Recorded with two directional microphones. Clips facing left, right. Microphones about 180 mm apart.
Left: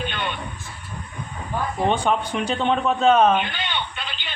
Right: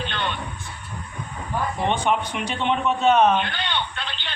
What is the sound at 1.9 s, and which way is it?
Speech, 40° left (ahead or behind).